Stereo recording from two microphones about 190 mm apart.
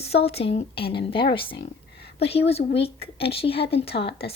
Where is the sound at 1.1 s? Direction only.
25° left (ahead or behind).